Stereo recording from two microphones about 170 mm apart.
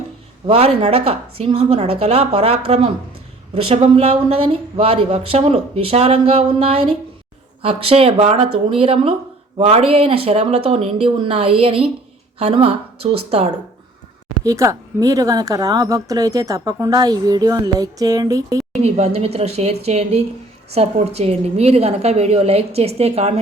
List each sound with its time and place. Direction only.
0.4 s speech: 35° right (ahead or behind)
14.4 s speech: 20° right (ahead or behind)
18.8 s speech: 40° right (ahead or behind)